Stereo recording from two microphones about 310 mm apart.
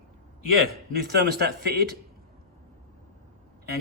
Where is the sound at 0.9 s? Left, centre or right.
Right.